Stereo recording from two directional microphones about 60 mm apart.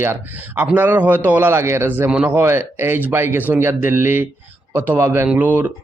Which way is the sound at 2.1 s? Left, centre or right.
Centre.